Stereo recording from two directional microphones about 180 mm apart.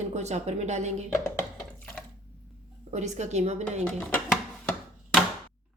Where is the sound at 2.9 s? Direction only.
40° right (ahead or behind).